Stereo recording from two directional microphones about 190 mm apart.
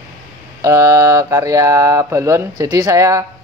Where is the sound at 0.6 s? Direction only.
15° right (ahead or behind).